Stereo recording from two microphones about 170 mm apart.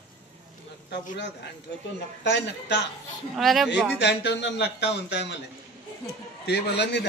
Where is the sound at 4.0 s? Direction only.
90° left.